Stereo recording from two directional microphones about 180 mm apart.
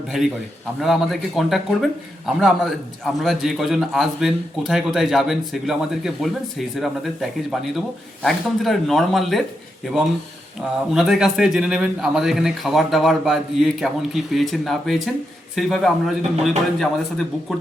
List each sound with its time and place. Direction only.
0.8 s a man's voice: centre (ahead or behind)
10.9 s a man's voice: centre (ahead or behind)